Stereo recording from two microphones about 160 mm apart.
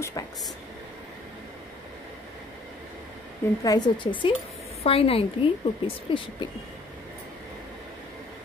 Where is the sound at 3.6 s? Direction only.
25° left (ahead or behind).